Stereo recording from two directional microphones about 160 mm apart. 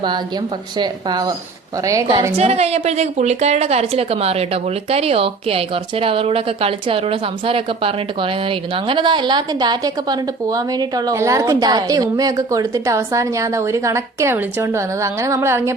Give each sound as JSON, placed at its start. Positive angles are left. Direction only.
{"t": 0.8, "sound": "a woman's voice", "side_deg": -25}
{"t": 2.4, "sound": "a woman's voice", "side_deg": -40}